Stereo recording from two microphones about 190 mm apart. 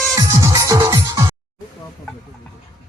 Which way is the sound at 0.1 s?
15° right (ahead or behind).